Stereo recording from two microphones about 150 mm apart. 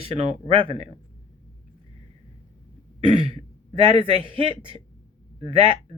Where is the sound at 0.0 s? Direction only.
40° right (ahead or behind).